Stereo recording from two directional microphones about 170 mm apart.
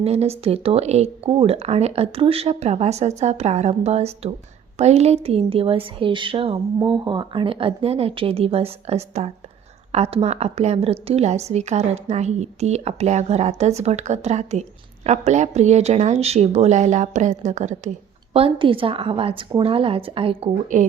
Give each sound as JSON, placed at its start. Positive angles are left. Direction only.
{"t": 0.0, "sound": "a woman's voice", "side_deg": -40}
{"t": 18.3, "sound": "a woman's voice", "side_deg": -30}